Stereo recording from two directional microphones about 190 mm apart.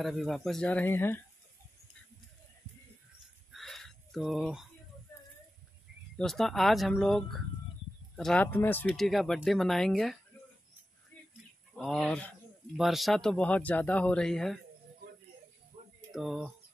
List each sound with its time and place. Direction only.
0.0 s speech: centre (ahead or behind)
3.5 s a sound: centre (ahead or behind)
6.1 s speech: centre (ahead or behind)
11.7 s speech: 5° left (ahead or behind)
16.1 s speech: centre (ahead or behind)